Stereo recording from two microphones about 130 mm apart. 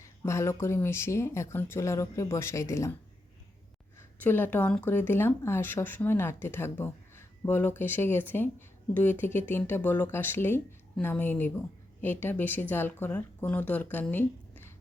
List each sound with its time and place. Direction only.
0.0 s speech: 20° left (ahead or behind)
4.2 s speech: 15° left (ahead or behind)